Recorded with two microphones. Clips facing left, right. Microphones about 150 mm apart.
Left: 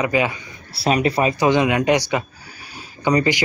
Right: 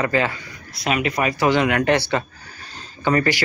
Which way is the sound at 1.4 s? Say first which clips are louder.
Even; 20° left (ahead or behind).